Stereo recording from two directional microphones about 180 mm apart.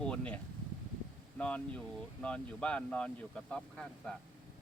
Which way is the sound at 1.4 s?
5° left (ahead or behind).